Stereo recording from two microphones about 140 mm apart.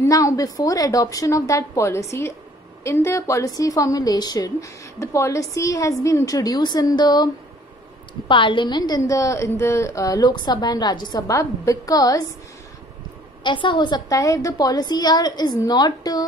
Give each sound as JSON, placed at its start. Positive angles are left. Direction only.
{"t": 0.0, "sound": "a woman's voice", "side_deg": 20}
{"t": 8.3, "sound": "a woman's voice", "side_deg": 35}
{"t": 13.4, "sound": "a woman's voice", "side_deg": 35}